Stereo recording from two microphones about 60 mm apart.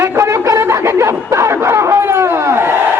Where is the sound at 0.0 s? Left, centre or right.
Right.